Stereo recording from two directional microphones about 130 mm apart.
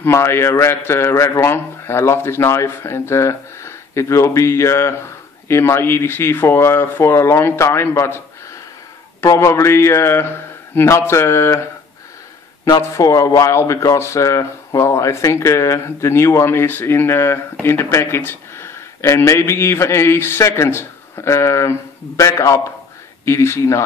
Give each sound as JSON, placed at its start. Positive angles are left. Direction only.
{"t": 0.0, "sound": "speech", "side_deg": 20}
{"t": 9.2, "sound": "speech", "side_deg": 25}
{"t": 12.6, "sound": "speech", "side_deg": 30}